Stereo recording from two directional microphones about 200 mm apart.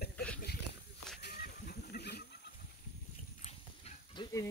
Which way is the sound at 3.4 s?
25° left (ahead or behind).